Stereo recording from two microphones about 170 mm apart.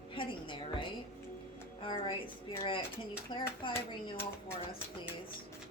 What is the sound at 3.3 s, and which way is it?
Speech, 25° left (ahead or behind).